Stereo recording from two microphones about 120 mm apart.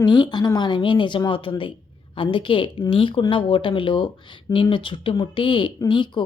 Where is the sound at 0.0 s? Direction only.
40° left (ahead or behind).